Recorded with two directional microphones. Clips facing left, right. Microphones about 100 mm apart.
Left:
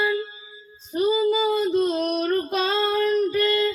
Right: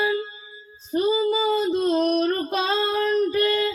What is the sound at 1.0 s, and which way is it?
Child singing, 30° right (ahead or behind).